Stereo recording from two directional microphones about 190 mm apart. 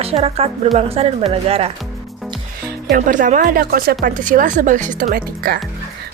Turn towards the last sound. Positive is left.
turn(degrees=-50)  # may be behind; listen again after turning